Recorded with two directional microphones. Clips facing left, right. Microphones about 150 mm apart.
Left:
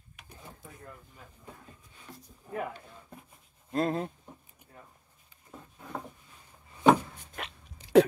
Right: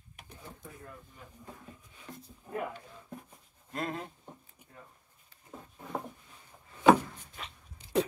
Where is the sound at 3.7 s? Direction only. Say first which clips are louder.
Left 8 dB; 35° left (ahead or behind).